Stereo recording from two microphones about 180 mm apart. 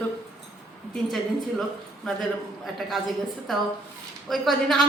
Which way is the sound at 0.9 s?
Centre (ahead or behind).